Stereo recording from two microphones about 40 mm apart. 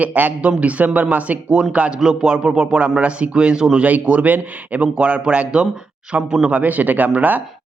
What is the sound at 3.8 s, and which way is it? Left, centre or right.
A man's voice, right.